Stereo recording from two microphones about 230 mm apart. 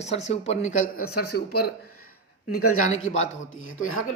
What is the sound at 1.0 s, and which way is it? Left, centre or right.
Speech, left.